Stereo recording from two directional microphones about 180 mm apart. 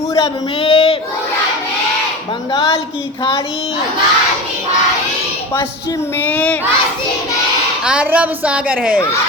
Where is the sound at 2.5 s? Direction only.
25° left (ahead or behind).